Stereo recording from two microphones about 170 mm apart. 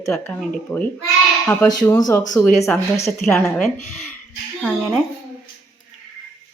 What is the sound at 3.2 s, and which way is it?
Speech, centre (ahead or behind).